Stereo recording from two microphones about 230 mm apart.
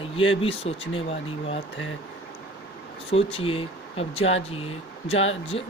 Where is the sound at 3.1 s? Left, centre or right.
Left.